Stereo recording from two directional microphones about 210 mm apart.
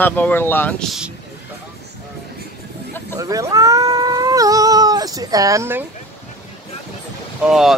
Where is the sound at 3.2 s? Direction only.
15° right (ahead or behind).